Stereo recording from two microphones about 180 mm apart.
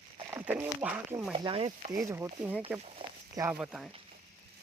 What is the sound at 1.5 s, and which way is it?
Stir, 30° right (ahead or behind).